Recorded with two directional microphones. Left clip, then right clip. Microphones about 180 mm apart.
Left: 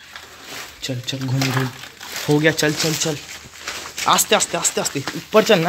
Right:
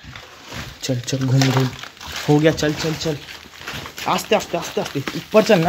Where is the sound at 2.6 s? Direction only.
10° left (ahead or behind).